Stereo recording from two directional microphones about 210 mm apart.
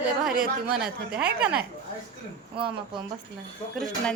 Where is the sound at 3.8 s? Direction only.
5° left (ahead or behind).